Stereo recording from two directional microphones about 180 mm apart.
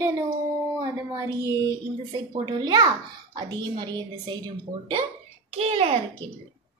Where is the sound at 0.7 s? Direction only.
20° right (ahead or behind).